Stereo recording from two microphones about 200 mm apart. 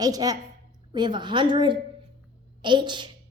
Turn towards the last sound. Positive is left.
turn(degrees=-25)  # may be behind; listen again after turning